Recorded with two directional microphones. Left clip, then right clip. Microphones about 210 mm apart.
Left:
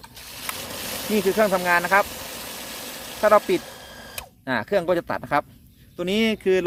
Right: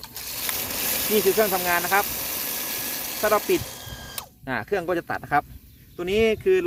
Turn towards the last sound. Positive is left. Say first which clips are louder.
# right 1 dB
turn(degrees=35)  # may be behind; listen again after turning